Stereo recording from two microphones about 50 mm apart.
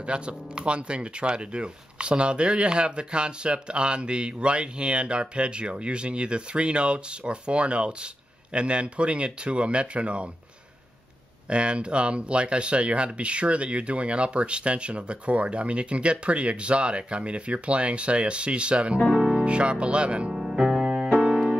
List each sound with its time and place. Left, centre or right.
0.0 s speech: right
11.4 s speech: right
20.3 s music: centre